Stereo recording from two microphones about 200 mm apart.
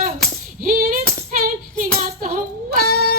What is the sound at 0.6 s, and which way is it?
Female singing, 45° right (ahead or behind).